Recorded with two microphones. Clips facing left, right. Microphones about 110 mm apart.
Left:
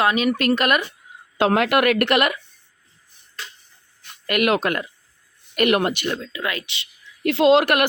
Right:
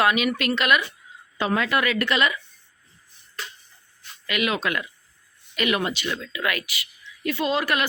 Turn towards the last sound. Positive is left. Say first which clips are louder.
# left 8 dB
turn(degrees=65)  # may be behind; listen again after turning